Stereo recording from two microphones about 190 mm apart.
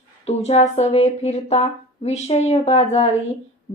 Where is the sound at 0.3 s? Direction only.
35° left (ahead or behind).